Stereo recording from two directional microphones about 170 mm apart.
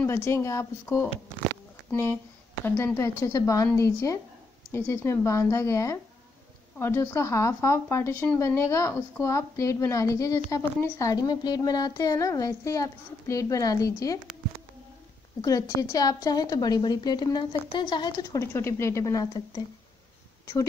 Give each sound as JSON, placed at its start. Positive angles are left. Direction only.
{"t": 0.0, "sound": "a woman's voice", "side_deg": 15}
{"t": 15.4, "sound": "a woman's voice", "side_deg": 20}